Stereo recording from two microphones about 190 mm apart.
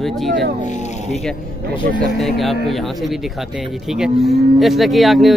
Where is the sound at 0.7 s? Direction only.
40° left (ahead or behind).